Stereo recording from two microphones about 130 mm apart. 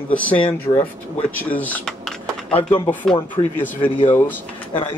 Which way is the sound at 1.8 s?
5° left (ahead or behind).